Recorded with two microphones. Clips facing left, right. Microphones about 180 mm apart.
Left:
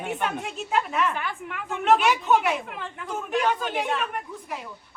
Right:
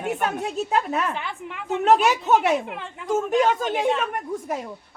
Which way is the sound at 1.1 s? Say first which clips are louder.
Right 1 dB; 20° right (ahead or behind).